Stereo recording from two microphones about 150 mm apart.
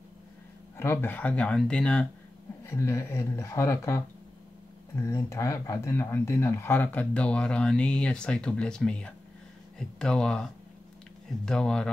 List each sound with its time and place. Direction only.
0.7 s speech: 15° left (ahead or behind)
2.6 s speech: 20° left (ahead or behind)